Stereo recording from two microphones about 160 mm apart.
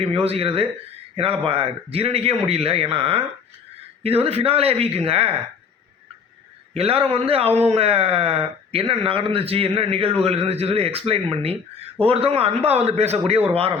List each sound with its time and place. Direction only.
0.0 s speech: 40° right (ahead or behind)
6.7 s speech: 35° right (ahead or behind)